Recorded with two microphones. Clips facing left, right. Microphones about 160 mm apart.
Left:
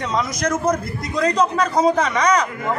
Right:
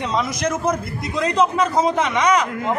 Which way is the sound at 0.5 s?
5° right (ahead or behind).